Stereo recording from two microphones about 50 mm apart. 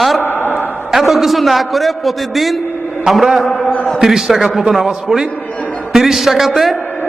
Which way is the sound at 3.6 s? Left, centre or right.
Left.